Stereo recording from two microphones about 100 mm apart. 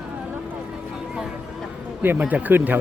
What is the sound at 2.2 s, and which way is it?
Speech, 15° right (ahead or behind).